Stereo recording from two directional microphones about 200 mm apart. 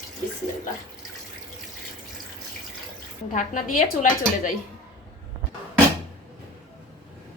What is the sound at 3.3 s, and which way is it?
Speech, 40° left (ahead or behind).